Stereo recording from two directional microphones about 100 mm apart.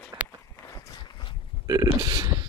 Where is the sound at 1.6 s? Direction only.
40° right (ahead or behind).